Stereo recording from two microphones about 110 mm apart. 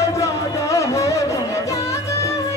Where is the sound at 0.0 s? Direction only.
25° left (ahead or behind).